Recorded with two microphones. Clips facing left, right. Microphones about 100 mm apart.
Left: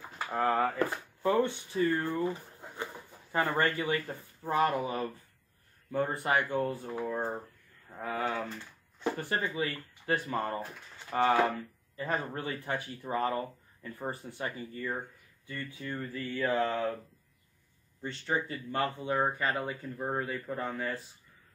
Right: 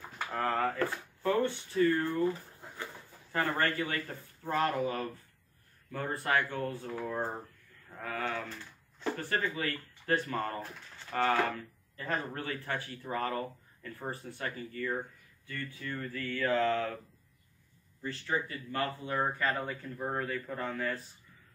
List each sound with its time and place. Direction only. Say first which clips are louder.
0.3 s speech: left 3 dB; 15° left (ahead or behind)
7.1 s speech: left 1 dB; 5° left (ahead or behind)
7.9 s speech: left 3 dB; 15° left (ahead or behind)
18.0 s speech: left 1 dB; 25° left (ahead or behind); by 21.0 s 10° left (ahead or behind)